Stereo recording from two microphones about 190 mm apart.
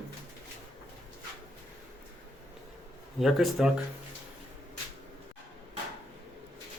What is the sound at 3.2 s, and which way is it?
Speech, centre (ahead or behind).